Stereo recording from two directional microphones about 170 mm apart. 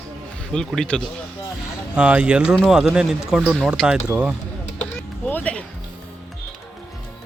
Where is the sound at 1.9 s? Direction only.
5° right (ahead or behind).